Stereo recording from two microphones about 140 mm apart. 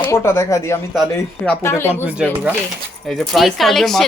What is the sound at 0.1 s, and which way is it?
Speech, 20° left (ahead or behind).